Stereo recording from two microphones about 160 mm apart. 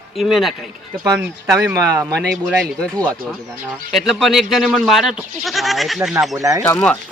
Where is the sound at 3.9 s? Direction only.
Centre (ahead or behind).